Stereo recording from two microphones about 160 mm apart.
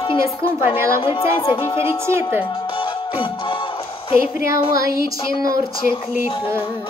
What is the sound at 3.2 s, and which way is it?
Music, 35° left (ahead or behind).